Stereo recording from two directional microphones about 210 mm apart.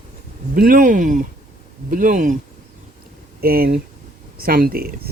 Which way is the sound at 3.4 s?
45° right (ahead or behind).